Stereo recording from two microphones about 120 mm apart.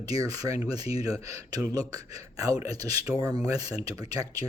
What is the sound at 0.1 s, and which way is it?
Speech, 30° right (ahead or behind).